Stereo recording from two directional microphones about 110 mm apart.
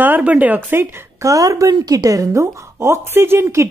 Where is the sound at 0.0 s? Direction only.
15° right (ahead or behind).